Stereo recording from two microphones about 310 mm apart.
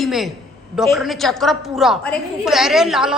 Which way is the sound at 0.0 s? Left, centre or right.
Centre.